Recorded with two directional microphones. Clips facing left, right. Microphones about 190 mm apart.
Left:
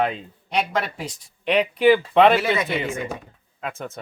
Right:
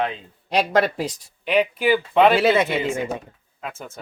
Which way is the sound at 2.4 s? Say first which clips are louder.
Right 5 dB; 25° right (ahead or behind).